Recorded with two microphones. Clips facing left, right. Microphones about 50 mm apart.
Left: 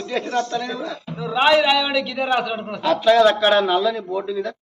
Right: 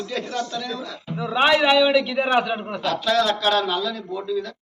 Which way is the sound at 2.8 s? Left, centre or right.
Left.